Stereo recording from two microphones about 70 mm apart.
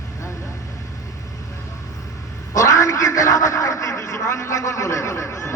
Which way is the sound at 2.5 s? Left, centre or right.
Left.